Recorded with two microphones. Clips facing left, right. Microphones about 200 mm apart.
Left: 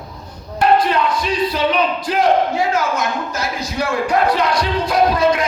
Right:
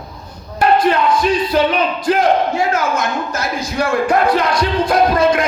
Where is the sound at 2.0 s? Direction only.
50° right (ahead or behind).